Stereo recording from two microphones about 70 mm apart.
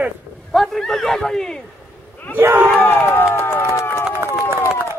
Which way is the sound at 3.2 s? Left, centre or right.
Left.